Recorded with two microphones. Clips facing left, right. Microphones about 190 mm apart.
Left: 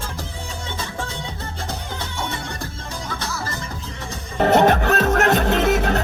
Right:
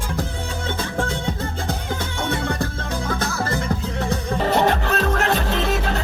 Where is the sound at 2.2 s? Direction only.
55° right (ahead or behind).